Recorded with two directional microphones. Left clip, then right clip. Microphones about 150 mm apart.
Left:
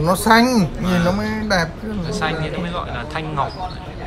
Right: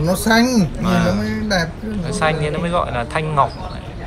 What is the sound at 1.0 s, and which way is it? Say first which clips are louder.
Speech: even; 55° left (ahead or behind).